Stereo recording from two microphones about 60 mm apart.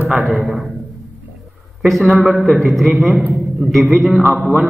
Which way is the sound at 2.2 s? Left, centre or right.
Centre.